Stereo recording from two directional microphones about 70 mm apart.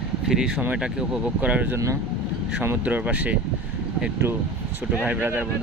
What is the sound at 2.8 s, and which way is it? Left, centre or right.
Speech, right.